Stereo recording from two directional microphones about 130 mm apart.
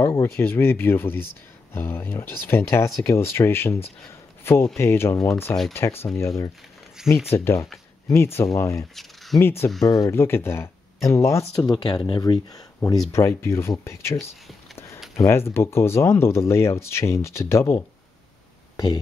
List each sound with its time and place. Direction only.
0.0 s speech: 20° left (ahead or behind)
7.0 s speech: 5° right (ahead or behind)
7.3 s speech: 20° left (ahead or behind)
8.9 s a sound: centre (ahead or behind)
9.4 s speech: 20° left (ahead or behind)
15.1 s speech: 20° left (ahead or behind)